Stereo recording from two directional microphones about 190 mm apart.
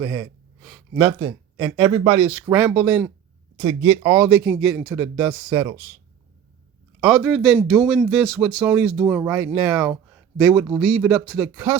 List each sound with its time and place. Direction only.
0.0 s speech: 20° right (ahead or behind)
0.6 s a sound: centre (ahead or behind)
1.0 s speech: 25° right (ahead or behind)
2.5 s speech: 10° right (ahead or behind)
3.6 s speech: 20° right (ahead or behind)
7.0 s speech: centre (ahead or behind)
10.8 s speech: 5° left (ahead or behind)
11.4 s speech: 10° right (ahead or behind)